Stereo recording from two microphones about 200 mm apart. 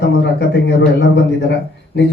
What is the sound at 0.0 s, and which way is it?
Speech, 60° left (ahead or behind).